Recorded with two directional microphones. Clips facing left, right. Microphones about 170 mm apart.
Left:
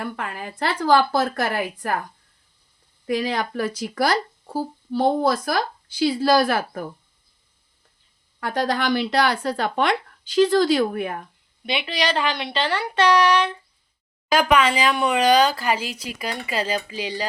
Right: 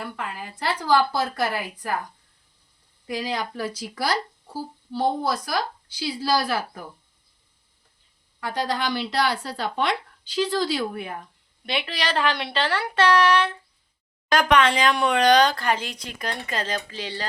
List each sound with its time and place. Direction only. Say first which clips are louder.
0.0 s speech: left 3 dB; 55° left (ahead or behind)
3.1 s speech: left 5 dB; 60° left (ahead or behind)
8.4 s speech: left 3 dB; 50° left (ahead or behind)
11.6 s speech: left 3 dB; centre (ahead or behind)
14.3 s speech: left 1 dB; 5° left (ahead or behind)